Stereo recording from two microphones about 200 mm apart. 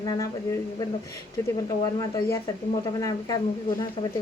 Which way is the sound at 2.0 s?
15° left (ahead or behind).